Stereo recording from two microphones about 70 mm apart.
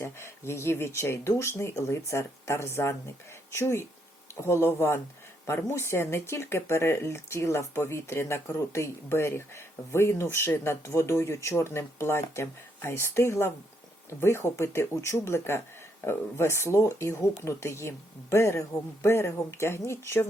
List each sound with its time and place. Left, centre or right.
0.0 s speech: left